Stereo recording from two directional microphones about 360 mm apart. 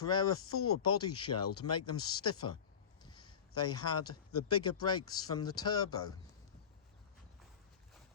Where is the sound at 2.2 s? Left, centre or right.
Left.